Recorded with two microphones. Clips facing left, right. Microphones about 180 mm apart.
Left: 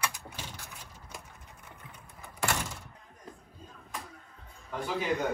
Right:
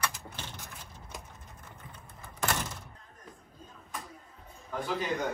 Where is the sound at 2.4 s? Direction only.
Centre (ahead or behind).